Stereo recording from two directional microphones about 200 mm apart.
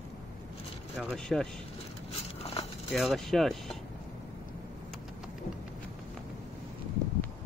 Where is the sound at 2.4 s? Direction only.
30° left (ahead or behind).